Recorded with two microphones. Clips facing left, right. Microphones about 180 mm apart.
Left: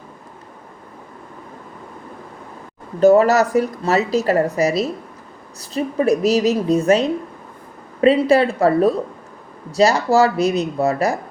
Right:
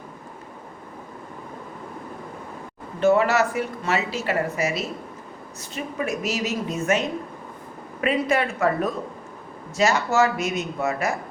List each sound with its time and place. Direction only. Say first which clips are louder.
3.0 s a woman's voice: left 7 dB; 40° left (ahead or behind)